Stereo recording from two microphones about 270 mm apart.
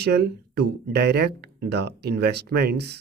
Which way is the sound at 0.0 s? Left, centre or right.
Right.